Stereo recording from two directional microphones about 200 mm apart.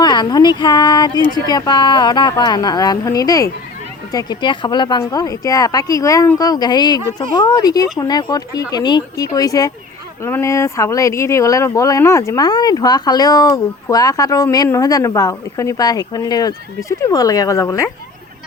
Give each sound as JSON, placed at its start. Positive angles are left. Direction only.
{"t": 0.0, "sound": "speech", "side_deg": 20}